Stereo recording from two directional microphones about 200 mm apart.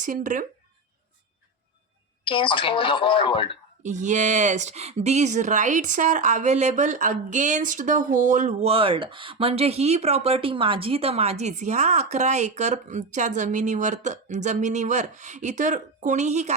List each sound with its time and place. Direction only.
0.0 s speech: 40° right (ahead or behind)
2.2 s speech: 25° left (ahead or behind)
3.8 s speech: 35° right (ahead or behind)